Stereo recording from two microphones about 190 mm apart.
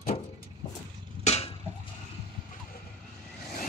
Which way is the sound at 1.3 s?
35° left (ahead or behind).